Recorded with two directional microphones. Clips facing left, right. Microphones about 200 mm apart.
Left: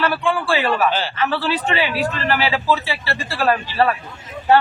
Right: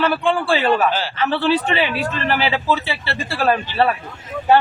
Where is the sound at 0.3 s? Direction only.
30° right (ahead or behind).